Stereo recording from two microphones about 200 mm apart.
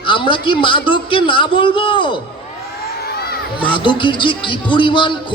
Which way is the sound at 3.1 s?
50° left (ahead or behind).